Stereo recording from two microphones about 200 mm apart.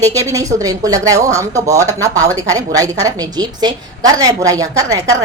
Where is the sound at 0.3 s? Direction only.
15° right (ahead or behind).